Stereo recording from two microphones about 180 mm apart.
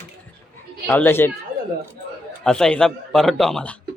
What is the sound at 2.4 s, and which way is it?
A man's voice, 5° left (ahead or behind).